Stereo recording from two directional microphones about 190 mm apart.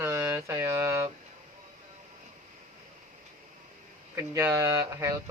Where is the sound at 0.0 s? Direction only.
15° right (ahead or behind).